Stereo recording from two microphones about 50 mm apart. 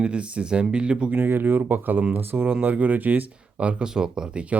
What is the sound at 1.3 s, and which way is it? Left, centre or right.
Speech, right.